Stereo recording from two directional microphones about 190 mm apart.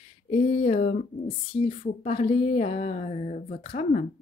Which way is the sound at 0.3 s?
30° left (ahead or behind).